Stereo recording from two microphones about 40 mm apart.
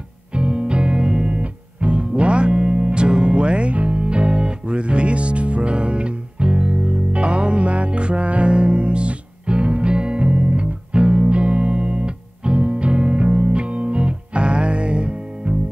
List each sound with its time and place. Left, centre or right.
0.3 s music: right